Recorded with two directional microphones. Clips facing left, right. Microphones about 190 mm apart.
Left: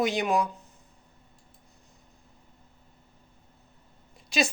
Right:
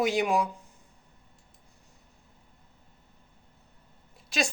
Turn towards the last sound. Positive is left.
turn(degrees=0)  # may be behind; listen again after turning